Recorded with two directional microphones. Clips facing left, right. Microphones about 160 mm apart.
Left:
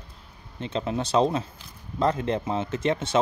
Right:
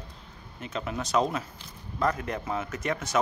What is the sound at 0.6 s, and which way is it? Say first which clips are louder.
Speech: left 5 dB; 25° left (ahead or behind).